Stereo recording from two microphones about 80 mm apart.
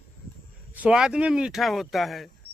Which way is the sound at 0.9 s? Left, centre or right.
Centre.